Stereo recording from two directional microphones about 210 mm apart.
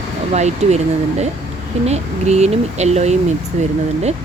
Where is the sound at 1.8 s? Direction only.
30° right (ahead or behind).